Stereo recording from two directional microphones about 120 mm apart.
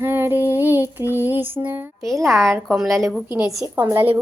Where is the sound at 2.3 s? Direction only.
Centre (ahead or behind).